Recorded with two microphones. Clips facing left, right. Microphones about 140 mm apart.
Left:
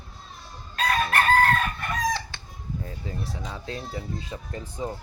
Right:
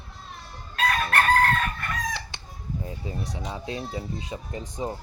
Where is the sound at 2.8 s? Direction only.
15° right (ahead or behind).